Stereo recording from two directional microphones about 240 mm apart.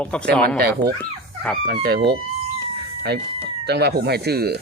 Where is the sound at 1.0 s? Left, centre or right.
Centre.